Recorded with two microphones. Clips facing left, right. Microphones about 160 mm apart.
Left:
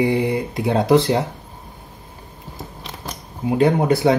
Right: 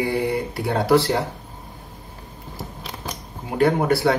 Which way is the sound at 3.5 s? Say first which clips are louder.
Left 2 dB; 20° left (ahead or behind).